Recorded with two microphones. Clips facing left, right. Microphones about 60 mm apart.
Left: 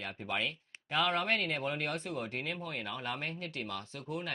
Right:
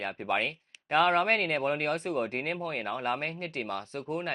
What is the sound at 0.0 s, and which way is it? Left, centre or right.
Speech, right.